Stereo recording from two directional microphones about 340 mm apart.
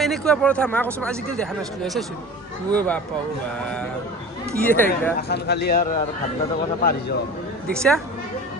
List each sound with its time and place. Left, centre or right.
0.0 s speech: centre
4.6 s speech: centre
5.3 s speech: left
7.7 s speech: centre